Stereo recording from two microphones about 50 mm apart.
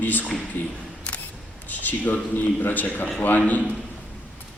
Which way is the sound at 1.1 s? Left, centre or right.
Left.